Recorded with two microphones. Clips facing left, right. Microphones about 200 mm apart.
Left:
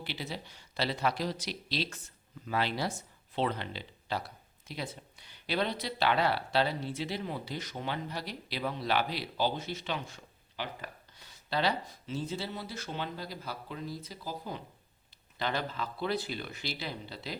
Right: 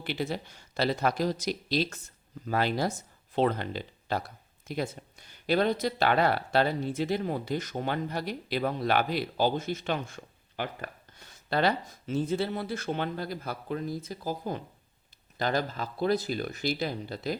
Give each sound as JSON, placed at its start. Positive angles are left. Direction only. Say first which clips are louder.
{"t": 0.0, "sound": "speech", "louder": "right 7 dB", "side_deg": -50}